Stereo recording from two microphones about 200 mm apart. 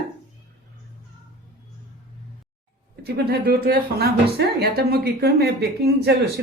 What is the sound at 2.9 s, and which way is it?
A woman's voice, 50° right (ahead or behind).